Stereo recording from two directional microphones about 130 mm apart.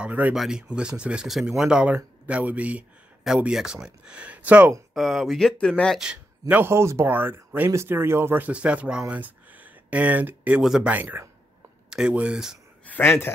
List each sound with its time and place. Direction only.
0.0 s speech: 10° right (ahead or behind)
4.9 s speech: centre (ahead or behind)
6.4 s speech: 20° right (ahead or behind)
12.8 s speech: 15° left (ahead or behind)